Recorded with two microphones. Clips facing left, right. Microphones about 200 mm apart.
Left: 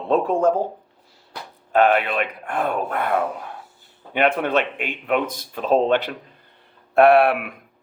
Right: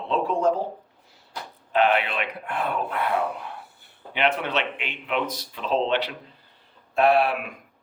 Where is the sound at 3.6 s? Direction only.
60° right (ahead or behind).